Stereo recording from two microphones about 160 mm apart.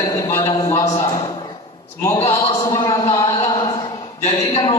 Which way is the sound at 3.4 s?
30° left (ahead or behind).